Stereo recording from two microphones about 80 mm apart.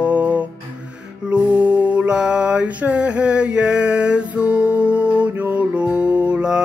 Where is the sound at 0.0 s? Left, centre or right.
Centre.